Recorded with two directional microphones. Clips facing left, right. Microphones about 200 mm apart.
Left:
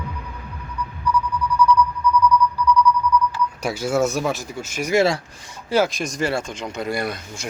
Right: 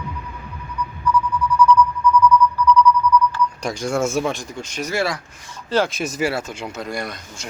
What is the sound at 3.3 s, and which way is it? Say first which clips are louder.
Speech: right 1 dB; 5° left (ahead or behind).